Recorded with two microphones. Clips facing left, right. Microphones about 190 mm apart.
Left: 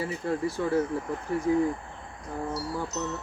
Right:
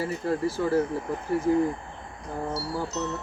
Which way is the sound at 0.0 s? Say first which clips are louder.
Right 2 dB; centre (ahead or behind).